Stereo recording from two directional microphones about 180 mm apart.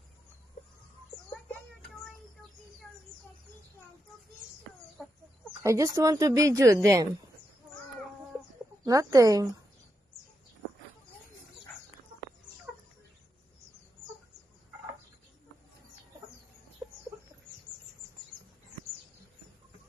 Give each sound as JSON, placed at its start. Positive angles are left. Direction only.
{"t": 5.0, "sound": "chicken", "side_deg": 0}
{"t": 5.6, "sound": "speech", "side_deg": -15}
{"t": 8.8, "sound": "speech", "side_deg": -20}